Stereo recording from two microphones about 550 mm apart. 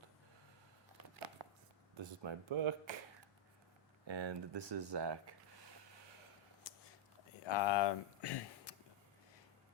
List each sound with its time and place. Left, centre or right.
1.4 s chopping: right
2.0 s speech: right
4.0 s speech: right
7.3 s speech: left